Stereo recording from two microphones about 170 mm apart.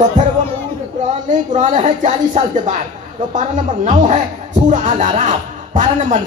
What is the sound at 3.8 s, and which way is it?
Speech, 45° right (ahead or behind).